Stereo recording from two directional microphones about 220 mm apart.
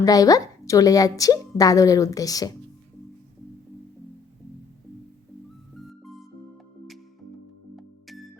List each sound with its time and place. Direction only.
0.0 s a woman's voice: 15° left (ahead or behind)
5.9 s music: centre (ahead or behind)
7.8 s music: centre (ahead or behind)